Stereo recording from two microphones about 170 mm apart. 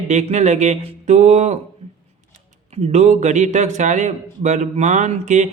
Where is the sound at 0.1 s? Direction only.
45° right (ahead or behind).